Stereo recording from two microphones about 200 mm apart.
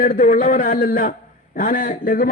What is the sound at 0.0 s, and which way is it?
A man's voice, 40° left (ahead or behind).